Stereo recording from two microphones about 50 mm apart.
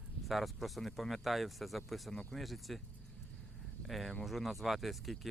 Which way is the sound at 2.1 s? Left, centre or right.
Centre.